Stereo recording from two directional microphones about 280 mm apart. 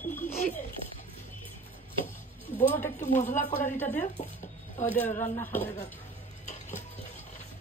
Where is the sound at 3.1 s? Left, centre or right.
Left.